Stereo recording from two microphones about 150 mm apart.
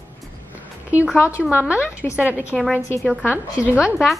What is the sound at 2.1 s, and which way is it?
A woman's voice, 10° right (ahead or behind).